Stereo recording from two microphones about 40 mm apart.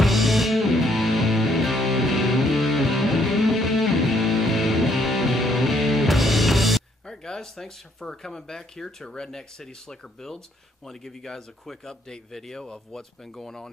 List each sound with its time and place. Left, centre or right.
0.0 s music: centre
7.1 s speech: centre
12.6 s speech: left
13.2 s speech: centre